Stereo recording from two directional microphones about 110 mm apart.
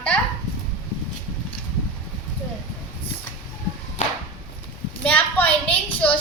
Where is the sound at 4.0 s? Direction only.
90° left.